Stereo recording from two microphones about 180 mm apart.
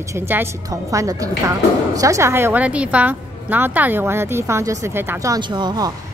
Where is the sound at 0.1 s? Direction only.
15° right (ahead or behind).